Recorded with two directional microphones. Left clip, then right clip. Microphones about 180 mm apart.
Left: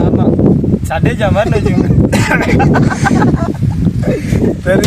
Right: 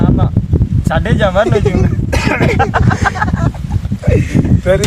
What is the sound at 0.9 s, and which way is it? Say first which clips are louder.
Speech: right 3 dB; 15° left (ahead or behind).